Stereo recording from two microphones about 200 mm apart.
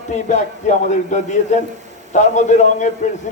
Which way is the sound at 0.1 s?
35° left (ahead or behind).